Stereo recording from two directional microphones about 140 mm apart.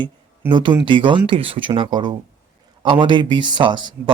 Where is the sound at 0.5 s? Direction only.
35° right (ahead or behind).